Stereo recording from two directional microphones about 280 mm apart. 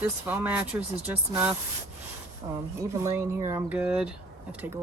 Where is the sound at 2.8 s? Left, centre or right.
Centre.